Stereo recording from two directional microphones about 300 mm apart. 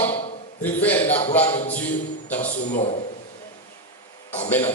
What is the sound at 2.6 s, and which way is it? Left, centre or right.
Speech, left.